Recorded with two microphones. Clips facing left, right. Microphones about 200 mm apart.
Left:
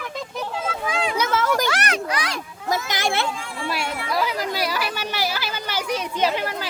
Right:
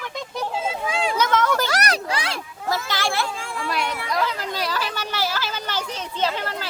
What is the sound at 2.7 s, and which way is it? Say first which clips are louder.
Children playing: left 1 dB; 20° left (ahead or behind).